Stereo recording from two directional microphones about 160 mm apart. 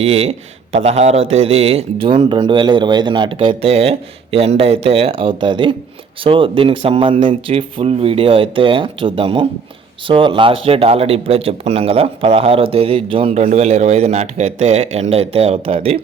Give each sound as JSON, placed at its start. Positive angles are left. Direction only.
{"t": 0.0, "sound": "speech", "side_deg": -40}